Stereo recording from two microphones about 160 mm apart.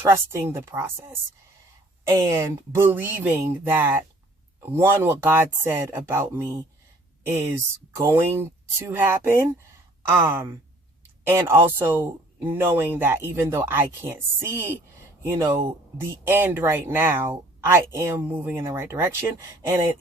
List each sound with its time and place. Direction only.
0.0 s speech: 15° right (ahead or behind)
7.9 s speech: 15° right (ahead or behind)